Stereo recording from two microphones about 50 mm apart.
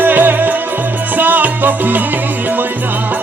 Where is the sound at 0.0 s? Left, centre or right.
Right.